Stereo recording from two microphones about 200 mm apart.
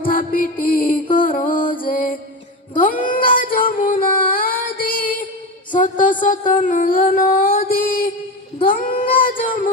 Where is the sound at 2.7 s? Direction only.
40° left (ahead or behind).